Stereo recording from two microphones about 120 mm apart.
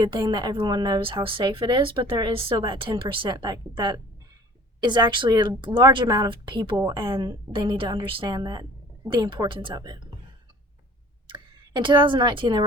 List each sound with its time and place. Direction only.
0.0 s a woman's voice: 35° right (ahead or behind)
11.3 s speech: 40° right (ahead or behind)